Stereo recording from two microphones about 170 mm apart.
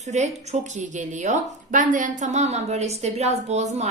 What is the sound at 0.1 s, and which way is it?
A woman's voice, 40° right (ahead or behind).